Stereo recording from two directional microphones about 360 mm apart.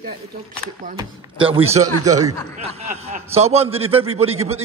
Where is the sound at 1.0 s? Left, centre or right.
Centre.